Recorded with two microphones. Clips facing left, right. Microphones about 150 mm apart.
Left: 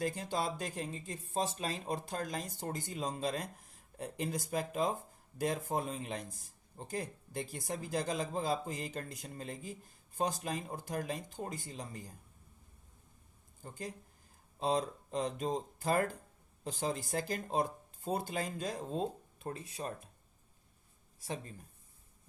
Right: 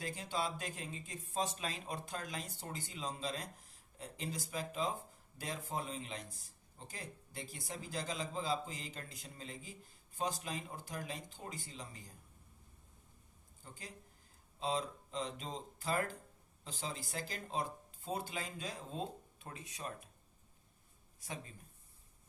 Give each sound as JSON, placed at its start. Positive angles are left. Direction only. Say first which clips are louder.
{"t": 0.0, "sound": "a man's voice", "louder": "left 4 dB", "side_deg": 45}
{"t": 13.6, "sound": "a man's voice", "louder": "left 9 dB", "side_deg": 50}